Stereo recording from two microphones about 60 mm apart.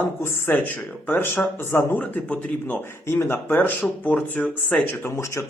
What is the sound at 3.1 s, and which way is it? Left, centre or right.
Speech, left.